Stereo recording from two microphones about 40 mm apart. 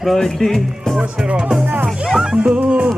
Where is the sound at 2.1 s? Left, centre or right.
Centre.